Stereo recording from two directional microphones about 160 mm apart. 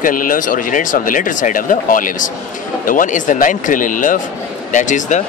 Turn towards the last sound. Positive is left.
turn(degrees=50)  # may be behind; listen again after turning